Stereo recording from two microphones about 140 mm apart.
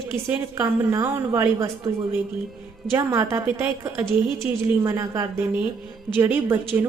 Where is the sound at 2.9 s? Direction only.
20° right (ahead or behind).